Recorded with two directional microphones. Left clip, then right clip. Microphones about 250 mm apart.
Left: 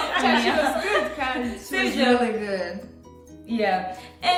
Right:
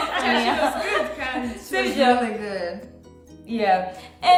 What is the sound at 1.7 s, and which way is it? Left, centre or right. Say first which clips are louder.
Speech: right 3 dB; centre.